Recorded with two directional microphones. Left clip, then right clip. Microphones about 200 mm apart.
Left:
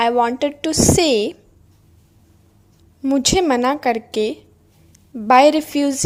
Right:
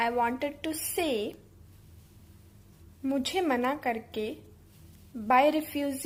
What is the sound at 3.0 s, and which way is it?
A woman's voice, 40° left (ahead or behind).